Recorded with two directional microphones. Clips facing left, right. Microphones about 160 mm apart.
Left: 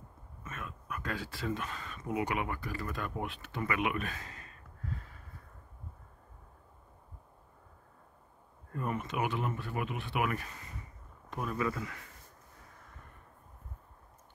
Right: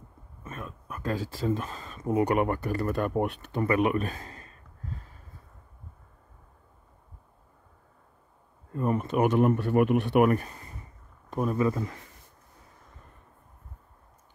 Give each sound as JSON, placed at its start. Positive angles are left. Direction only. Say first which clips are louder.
{"t": 0.4, "sound": "speech", "louder": "right 4 dB", "side_deg": -30}
{"t": 3.6, "sound": "speech", "louder": "right 8 dB", "side_deg": -35}
{"t": 8.7, "sound": "speech", "louder": "right 9 dB", "side_deg": -35}
{"t": 10.2, "sound": "speech", "louder": "right 11 dB", "side_deg": -40}